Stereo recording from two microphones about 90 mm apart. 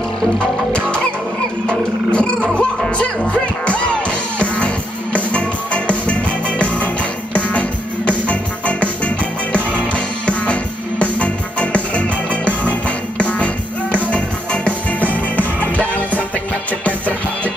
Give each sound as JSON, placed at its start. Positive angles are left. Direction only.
{"t": 0.7, "sound": "music", "side_deg": 10}
{"t": 7.3, "sound": "music", "side_deg": 15}